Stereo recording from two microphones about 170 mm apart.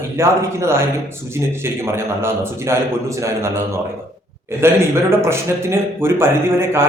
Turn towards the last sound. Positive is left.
turn(degrees=-15)  # may be behind; listen again after turning